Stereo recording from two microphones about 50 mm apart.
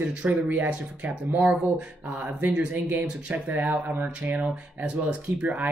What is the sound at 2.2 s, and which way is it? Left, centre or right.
Speech, right.